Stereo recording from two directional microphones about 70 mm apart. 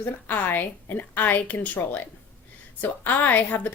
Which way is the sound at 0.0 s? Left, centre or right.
Left.